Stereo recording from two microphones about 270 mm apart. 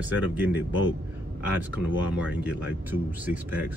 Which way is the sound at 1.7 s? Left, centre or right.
Centre.